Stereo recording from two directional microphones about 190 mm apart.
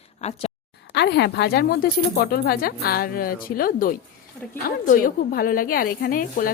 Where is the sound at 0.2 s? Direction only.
35° left (ahead or behind).